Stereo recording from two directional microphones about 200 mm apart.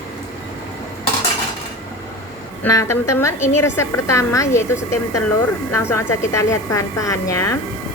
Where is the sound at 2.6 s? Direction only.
15° left (ahead or behind).